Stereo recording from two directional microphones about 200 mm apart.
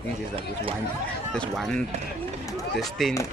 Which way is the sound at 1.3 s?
5° left (ahead or behind).